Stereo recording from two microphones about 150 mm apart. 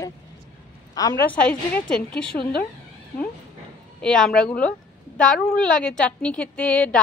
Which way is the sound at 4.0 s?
5° left (ahead or behind).